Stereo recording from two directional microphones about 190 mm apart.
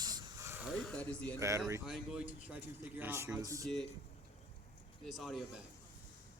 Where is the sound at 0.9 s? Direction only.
5° left (ahead or behind).